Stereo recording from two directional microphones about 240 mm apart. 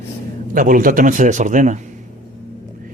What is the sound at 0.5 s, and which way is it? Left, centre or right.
A man's voice, right.